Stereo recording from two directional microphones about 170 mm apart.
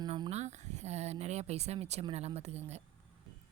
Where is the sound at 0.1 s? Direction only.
35° right (ahead or behind).